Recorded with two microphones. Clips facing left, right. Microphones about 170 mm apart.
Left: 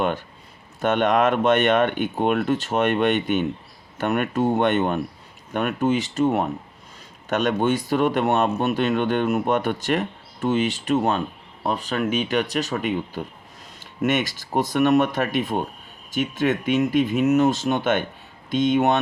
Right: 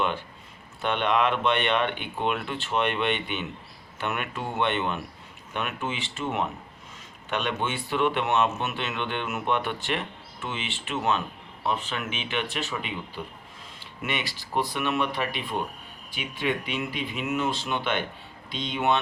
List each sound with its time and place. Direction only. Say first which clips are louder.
0.8 s speech: left 5 dB; 45° left (ahead or behind)